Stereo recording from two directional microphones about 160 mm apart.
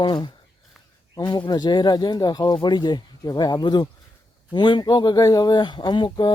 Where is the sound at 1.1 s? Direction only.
25° left (ahead or behind).